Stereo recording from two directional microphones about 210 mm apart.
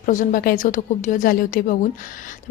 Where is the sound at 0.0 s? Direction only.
40° left (ahead or behind).